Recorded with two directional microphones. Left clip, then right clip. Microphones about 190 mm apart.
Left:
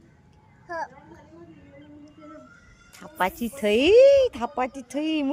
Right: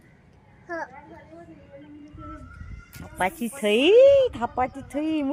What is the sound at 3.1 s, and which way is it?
Speech, 10° left (ahead or behind).